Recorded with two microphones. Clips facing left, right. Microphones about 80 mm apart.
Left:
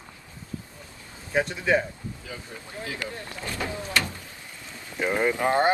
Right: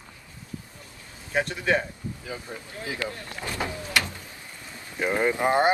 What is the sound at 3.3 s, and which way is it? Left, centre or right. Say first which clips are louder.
Vehicle: even; centre.